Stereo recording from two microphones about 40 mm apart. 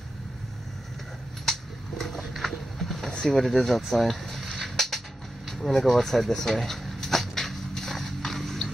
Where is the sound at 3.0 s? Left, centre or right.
Centre.